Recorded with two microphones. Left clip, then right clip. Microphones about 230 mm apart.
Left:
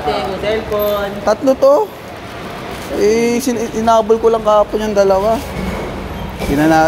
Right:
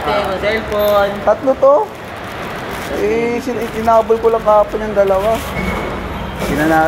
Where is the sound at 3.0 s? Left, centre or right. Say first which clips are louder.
Left 4 dB; left.